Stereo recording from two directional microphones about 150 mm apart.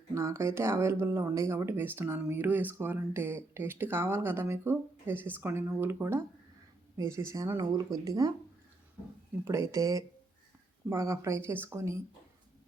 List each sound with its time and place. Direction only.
0.1 s a woman's voice: 20° right (ahead or behind)
9.4 s a woman's voice: 20° right (ahead or behind)